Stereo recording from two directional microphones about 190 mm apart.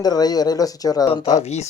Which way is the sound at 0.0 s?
20° left (ahead or behind).